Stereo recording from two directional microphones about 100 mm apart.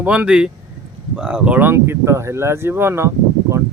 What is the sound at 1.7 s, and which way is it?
Speech, 30° right (ahead or behind).